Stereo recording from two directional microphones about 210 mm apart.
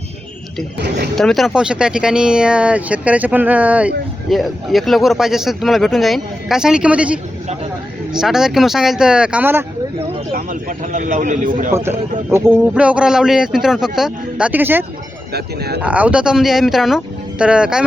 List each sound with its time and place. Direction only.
0.8 s speech: 55° right (ahead or behind)
1.1 s speech: centre (ahead or behind)
10.3 s speech: 40° right (ahead or behind)
11.7 s speech: 10° right (ahead or behind)
15.3 s speech: 50° right (ahead or behind)
15.8 s speech: 5° right (ahead or behind)